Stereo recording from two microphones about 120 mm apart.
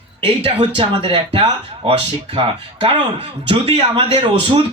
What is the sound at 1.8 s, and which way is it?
Speech, 60° right (ahead or behind).